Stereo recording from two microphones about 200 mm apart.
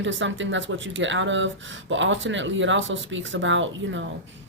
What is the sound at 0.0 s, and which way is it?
Speech, 65° right (ahead or behind).